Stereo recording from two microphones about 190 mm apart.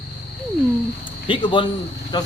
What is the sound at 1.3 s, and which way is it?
Speech, 25° left (ahead or behind).